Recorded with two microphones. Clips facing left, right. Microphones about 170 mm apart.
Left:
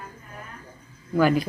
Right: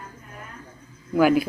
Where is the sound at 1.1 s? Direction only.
5° right (ahead or behind).